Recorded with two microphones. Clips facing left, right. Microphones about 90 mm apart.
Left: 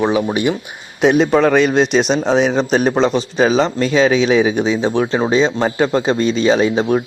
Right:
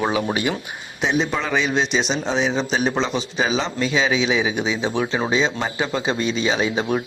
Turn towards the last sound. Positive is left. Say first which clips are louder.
# left 7 dB
turn(degrees=40)  # may be behind; listen again after turning